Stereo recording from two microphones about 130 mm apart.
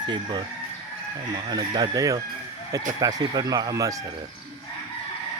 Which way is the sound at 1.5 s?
35° right (ahead or behind).